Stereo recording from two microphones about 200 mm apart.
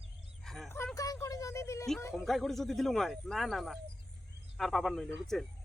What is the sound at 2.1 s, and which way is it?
Speech, centre (ahead or behind).